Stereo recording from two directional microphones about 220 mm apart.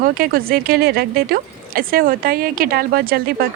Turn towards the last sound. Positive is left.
turn(degrees=-40)  # may be behind; listen again after turning